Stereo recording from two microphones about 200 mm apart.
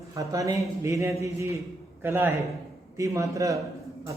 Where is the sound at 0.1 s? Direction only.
15° right (ahead or behind).